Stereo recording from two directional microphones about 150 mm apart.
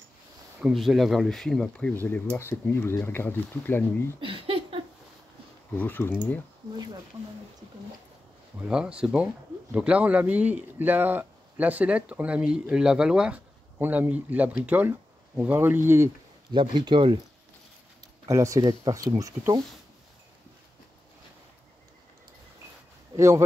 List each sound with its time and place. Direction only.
0.6 s speech: 5° right (ahead or behind); by 4.2 s 15° left (ahead or behind)
4.2 s a sound: 35° right (ahead or behind)
5.8 s speech: 15° left (ahead or behind)
8.5 s speech: 5° right (ahead or behind)
16.5 s speech: 30° right (ahead or behind)
18.2 s speech: 20° right (ahead or behind)
23.1 s speech: 20° right (ahead or behind)